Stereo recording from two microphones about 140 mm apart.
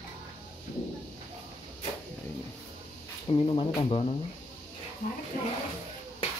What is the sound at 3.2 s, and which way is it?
Speech, 40° left (ahead or behind).